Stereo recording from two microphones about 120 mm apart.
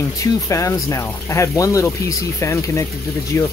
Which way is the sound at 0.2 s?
25° left (ahead or behind).